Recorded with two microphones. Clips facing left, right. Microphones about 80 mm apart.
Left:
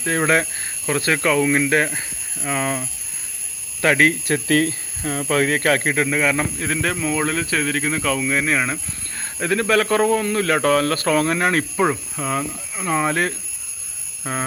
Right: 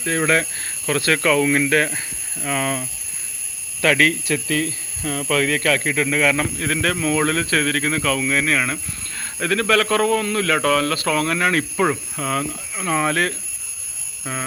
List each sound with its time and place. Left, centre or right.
0.0 s a man's voice: left
0.9 s speech: centre
4.3 s speech: left
5.3 s speech: left
6.1 s a man's voice: centre
11.8 s speech: centre
14.3 s speech: left